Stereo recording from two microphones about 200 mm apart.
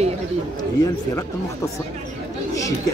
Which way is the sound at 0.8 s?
15° left (ahead or behind).